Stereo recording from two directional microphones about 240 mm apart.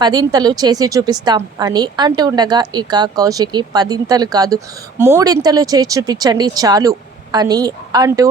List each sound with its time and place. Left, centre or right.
0.0 s a woman's voice: centre